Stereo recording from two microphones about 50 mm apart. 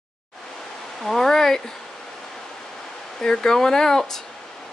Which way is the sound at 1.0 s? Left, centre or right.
Centre.